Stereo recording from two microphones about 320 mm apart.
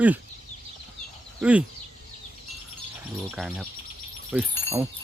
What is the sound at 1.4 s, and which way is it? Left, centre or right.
Speech, centre.